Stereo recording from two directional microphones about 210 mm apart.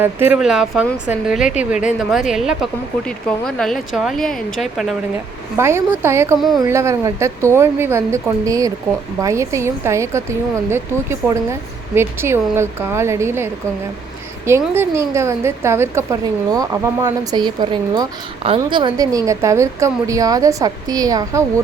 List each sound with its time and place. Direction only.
0.0 s a woman's voice: 10° right (ahead or behind)
5.5 s a woman's voice: 10° right (ahead or behind)
14.6 s a woman's voice: 10° right (ahead or behind)